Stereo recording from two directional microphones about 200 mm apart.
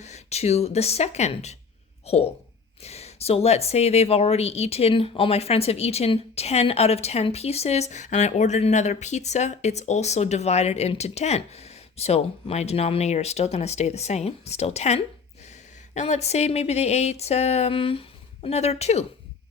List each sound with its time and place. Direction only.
0.0 s a woman's voice: 35° left (ahead or behind)